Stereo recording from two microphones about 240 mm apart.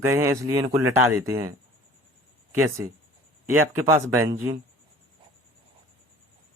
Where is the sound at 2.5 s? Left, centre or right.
Centre.